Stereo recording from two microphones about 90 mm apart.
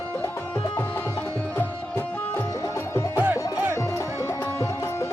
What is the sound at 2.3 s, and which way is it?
Music, 30° left (ahead or behind).